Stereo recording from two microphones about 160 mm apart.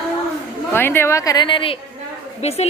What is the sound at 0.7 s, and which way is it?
A woman's voice, 15° left (ahead or behind).